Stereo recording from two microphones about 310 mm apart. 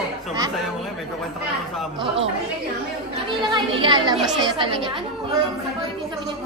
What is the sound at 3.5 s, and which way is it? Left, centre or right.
Speech, centre.